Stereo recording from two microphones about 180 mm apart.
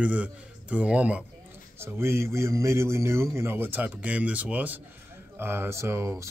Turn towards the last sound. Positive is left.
turn(degrees=-15)  # may be behind; listen again after turning